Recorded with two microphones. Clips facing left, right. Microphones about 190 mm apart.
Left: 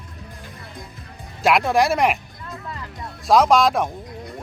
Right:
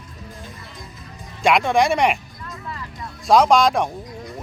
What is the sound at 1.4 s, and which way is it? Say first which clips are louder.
Speech: even; centre (ahead or behind).